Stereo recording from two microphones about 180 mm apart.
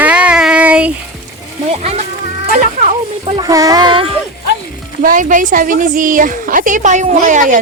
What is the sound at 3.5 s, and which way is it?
Speech, 20° right (ahead or behind).